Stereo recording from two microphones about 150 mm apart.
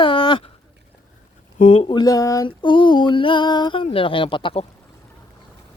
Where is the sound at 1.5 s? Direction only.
45° left (ahead or behind).